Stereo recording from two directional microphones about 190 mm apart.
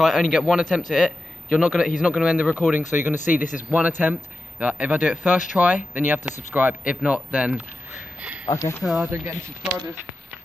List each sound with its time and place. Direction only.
0.0 s speech: centre (ahead or behind)
2.8 s speech: 40° left (ahead or behind)
4.0 s speech: 10° right (ahead or behind)
8.5 s speech: 15° left (ahead or behind)
8.8 s speech: centre (ahead or behind)